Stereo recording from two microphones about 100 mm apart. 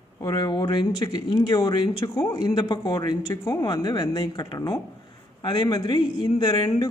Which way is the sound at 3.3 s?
25° left (ahead or behind).